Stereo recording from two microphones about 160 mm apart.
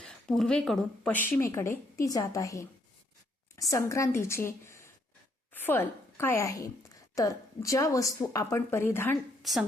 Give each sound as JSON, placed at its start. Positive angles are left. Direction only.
{"t": 0.0, "sound": "a woman's voice", "side_deg": 5}
{"t": 1.3, "sound": "a woman's voice", "side_deg": 15}
{"t": 9.4, "sound": "a woman's voice", "side_deg": 0}